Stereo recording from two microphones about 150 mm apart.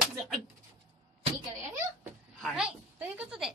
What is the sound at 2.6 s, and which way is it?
Speech, 10° right (ahead or behind).